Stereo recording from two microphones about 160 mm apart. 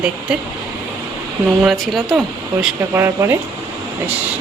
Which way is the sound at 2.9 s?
20° right (ahead or behind).